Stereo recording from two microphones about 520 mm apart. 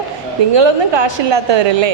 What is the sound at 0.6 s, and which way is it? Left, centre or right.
A woman's voice, right.